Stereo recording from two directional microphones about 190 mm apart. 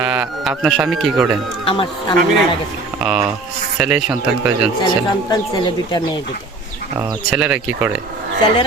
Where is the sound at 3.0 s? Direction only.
5° right (ahead or behind).